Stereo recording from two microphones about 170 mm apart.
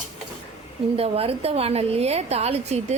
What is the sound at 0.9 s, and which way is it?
A woman's voice, 35° right (ahead or behind).